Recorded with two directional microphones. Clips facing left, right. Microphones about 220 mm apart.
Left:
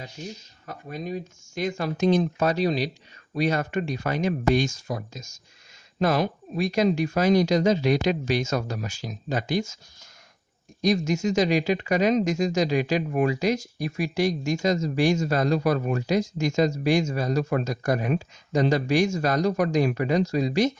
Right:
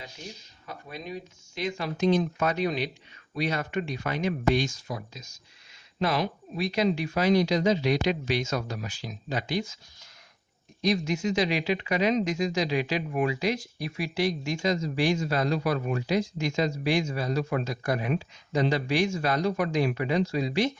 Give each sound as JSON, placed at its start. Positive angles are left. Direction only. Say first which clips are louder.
{"t": 0.7, "sound": "speech", "louder": "left 5 dB", "side_deg": 45}
{"t": 10.8, "sound": "speech", "louder": "left 3 dB", "side_deg": 45}